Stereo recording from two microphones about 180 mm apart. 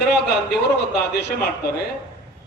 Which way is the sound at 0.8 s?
65° left (ahead or behind).